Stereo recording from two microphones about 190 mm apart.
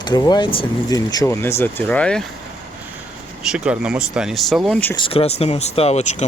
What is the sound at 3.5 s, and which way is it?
Speech, 5° right (ahead or behind).